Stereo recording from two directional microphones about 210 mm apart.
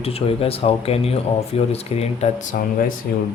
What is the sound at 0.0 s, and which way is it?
Speech, 30° left (ahead or behind).